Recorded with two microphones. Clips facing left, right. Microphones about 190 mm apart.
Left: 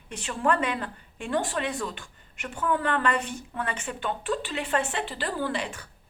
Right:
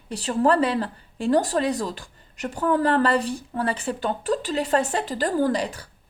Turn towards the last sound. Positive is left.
turn(degrees=-35)  # may be behind; listen again after turning